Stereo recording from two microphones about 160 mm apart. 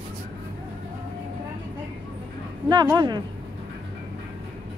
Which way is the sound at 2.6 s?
30° right (ahead or behind).